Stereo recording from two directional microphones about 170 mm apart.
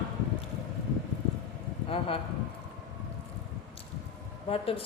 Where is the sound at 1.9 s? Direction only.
35° left (ahead or behind).